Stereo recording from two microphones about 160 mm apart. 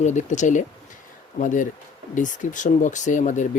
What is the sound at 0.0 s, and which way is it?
Speech, 50° left (ahead or behind).